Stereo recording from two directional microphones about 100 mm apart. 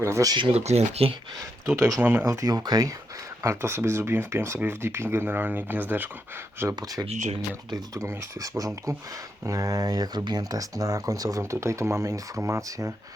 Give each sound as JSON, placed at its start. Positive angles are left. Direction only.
{"t": 0.0, "sound": "speech", "side_deg": -30}
{"t": 0.5, "sound": "speech", "side_deg": -90}
{"t": 1.4, "sound": "speech", "side_deg": -30}
{"t": 2.0, "sound": "speech", "side_deg": -20}
{"t": 2.2, "sound": "speech", "side_deg": -35}
{"t": 3.4, "sound": "speech", "side_deg": -25}
{"t": 6.7, "sound": "speech", "side_deg": -40}